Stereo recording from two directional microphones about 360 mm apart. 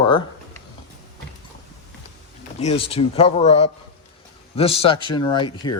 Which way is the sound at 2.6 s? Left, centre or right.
Centre.